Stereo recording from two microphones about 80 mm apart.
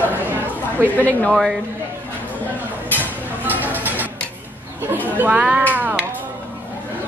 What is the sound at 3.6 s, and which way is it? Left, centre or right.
Music, right.